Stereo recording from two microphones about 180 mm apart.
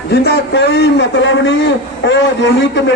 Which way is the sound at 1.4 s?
80° left.